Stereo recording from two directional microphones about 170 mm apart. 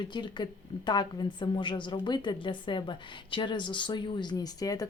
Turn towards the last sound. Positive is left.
turn(degrees=20)  # may be behind; listen again after turning